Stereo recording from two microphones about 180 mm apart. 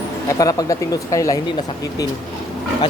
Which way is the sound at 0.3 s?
20° left (ahead or behind).